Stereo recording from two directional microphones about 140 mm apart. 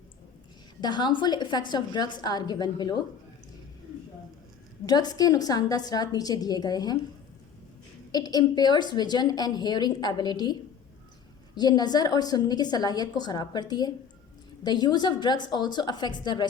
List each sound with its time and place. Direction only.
0.8 s a woman's voice: 30° left (ahead or behind)
4.9 s a woman's voice: 30° left (ahead or behind)
8.1 s a woman's voice: 30° left (ahead or behind)